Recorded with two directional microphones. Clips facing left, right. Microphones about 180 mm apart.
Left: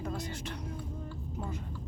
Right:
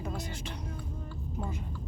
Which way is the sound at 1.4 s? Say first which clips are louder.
Right 2 dB; 15° right (ahead or behind).